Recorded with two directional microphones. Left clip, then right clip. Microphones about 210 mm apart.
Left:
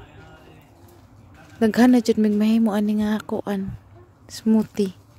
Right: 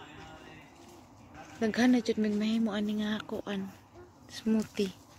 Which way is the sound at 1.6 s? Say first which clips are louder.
Left 10 dB; 35° left (ahead or behind).